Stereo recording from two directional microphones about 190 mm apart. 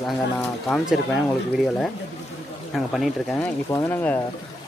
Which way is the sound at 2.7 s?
Centre (ahead or behind).